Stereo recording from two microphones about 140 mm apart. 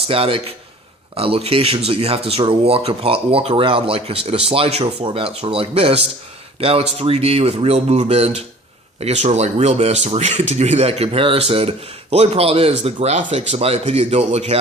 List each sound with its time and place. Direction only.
0.1 s a man's voice: 40° right (ahead or behind)